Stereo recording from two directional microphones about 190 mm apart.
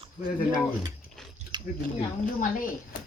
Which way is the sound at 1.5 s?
20° right (ahead or behind).